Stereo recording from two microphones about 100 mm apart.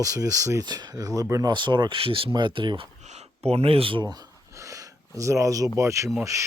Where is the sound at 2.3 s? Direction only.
55° right (ahead or behind).